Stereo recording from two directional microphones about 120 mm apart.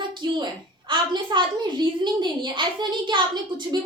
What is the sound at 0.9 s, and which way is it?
A woman's voice, 40° right (ahead or behind).